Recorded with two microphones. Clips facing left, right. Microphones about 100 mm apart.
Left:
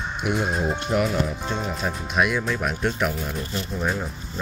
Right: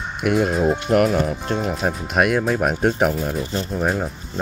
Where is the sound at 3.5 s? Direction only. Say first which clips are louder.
Right 5 dB; 35° right (ahead or behind).